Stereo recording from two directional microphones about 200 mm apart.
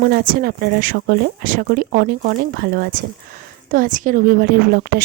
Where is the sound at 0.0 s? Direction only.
50° right (ahead or behind).